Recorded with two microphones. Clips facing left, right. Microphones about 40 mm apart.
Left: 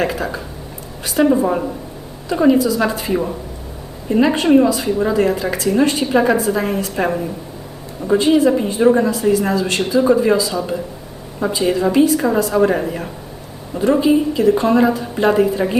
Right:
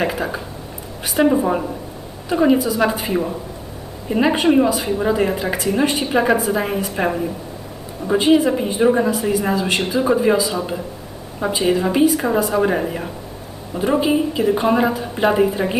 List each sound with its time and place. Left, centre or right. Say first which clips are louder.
0.0 s speech: left 1 dB; centre
2.5 s speech: left 4 dB; centre